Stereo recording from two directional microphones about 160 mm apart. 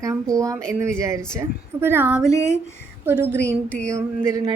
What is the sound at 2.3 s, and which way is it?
Speech, 20° left (ahead or behind).